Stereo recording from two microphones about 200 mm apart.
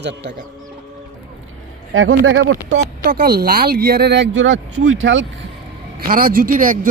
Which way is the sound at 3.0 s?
50° right (ahead or behind).